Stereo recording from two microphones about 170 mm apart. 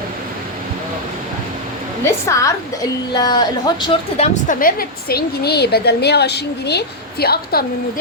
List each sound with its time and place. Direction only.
2.0 s a woman's voice: 15° left (ahead or behind)
4.2 s a woman's voice: 50° left (ahead or behind)